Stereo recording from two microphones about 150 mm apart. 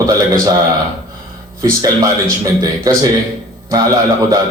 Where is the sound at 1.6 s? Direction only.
25° right (ahead or behind).